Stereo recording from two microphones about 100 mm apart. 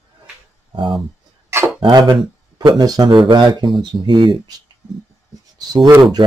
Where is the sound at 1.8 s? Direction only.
45° right (ahead or behind).